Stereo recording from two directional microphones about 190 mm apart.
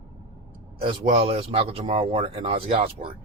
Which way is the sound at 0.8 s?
30° right (ahead or behind).